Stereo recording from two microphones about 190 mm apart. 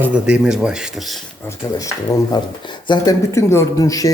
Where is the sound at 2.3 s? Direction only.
25° left (ahead or behind).